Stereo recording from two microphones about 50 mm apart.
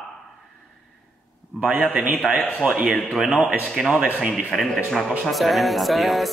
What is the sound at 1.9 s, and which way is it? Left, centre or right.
Speech, right.